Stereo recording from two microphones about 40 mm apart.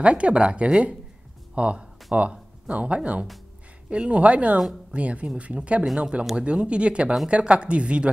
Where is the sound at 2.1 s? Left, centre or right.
Right.